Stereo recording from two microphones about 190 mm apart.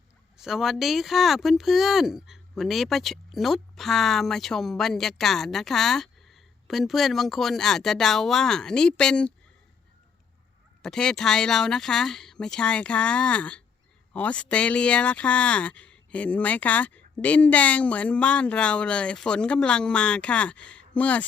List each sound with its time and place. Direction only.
0.3 s speech: centre (ahead or behind)
10.8 s speech: 5° left (ahead or behind)